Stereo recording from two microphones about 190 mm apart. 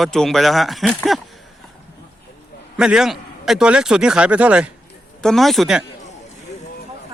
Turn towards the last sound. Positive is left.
turn(degrees=0)  # may be behind; listen again after turning